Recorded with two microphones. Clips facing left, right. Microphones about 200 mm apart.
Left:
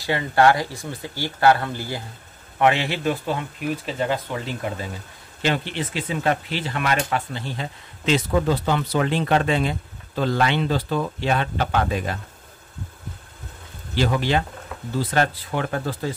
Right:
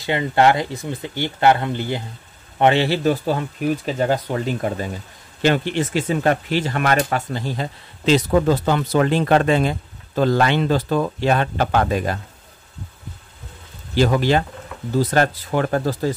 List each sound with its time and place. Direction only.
0.0 s speech: 20° right (ahead or behind); by 12.2 s 45° right (ahead or behind)
13.9 s speech: 45° right (ahead or behind)